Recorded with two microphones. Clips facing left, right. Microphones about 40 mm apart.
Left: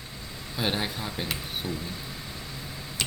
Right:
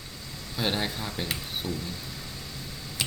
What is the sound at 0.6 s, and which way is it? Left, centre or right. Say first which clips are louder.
Speech: even; centre.